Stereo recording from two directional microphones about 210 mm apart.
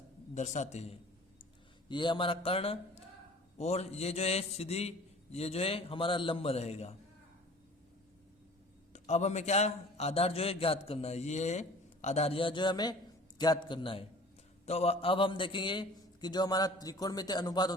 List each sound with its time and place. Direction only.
0.3 s a man's voice: 35° left (ahead or behind)
8.9 s a man's voice: 35° left (ahead or behind)